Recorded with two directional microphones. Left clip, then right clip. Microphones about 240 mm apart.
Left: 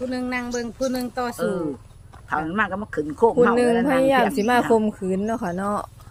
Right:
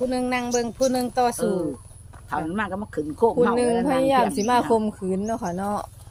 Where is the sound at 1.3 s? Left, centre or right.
Centre.